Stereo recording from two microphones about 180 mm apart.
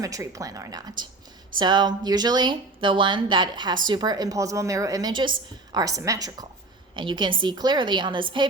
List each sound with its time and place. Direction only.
0.0 s a woman's voice: 20° right (ahead or behind)